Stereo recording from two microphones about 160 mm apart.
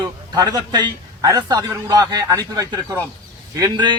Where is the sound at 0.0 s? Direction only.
25° right (ahead or behind).